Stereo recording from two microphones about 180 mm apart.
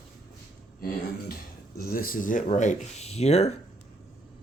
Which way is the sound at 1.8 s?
55° left (ahead or behind).